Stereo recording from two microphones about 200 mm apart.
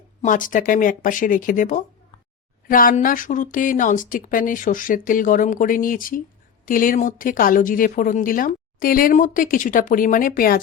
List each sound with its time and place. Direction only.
0.2 s speech: 40° left (ahead or behind)